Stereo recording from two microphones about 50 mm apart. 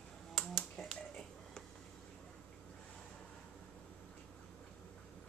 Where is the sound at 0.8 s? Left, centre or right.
Centre.